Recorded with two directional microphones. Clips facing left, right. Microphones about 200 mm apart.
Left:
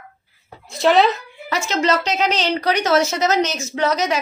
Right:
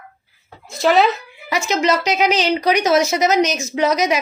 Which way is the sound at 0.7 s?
Centre (ahead or behind).